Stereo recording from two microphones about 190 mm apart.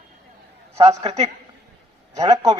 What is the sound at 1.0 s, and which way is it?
Speech, 35° right (ahead or behind).